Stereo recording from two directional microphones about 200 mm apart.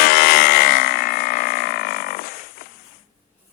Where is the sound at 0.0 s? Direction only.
50° left (ahead or behind).